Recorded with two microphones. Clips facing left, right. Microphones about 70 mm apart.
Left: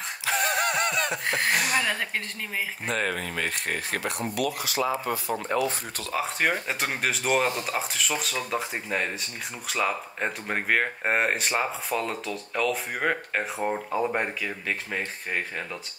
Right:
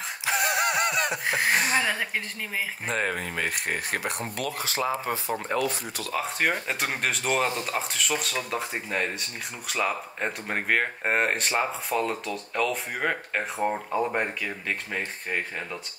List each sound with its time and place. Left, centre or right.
0.2 s a sound: centre
1.6 s a woman's voice: right
4.6 s speech: right
5.5 s speech: centre